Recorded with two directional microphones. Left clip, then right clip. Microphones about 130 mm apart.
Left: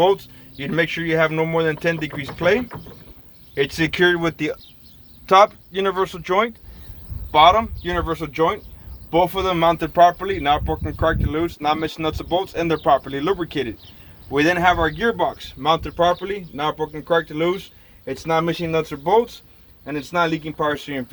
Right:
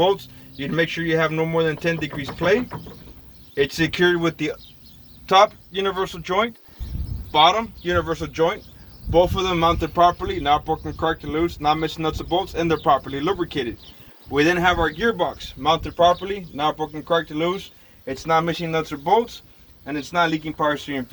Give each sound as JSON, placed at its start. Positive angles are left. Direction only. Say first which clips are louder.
{"t": 0.0, "sound": "speech", "louder": "left 2 dB", "side_deg": 35}
{"t": 7.3, "sound": "speech", "louder": "left 3 dB", "side_deg": 45}
{"t": 14.3, "sound": "a man's voice", "louder": "left 2 dB", "side_deg": 40}
{"t": 18.1, "sound": "speech", "louder": "even", "side_deg": 65}